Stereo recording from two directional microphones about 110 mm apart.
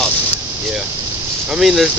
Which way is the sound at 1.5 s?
5° right (ahead or behind).